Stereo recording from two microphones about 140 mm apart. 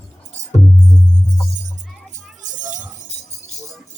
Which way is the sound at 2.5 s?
65° right (ahead or behind).